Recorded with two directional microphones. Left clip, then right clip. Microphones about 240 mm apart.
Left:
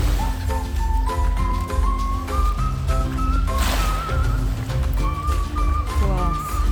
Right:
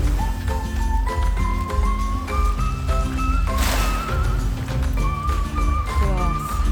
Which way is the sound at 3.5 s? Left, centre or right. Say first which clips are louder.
Even; right.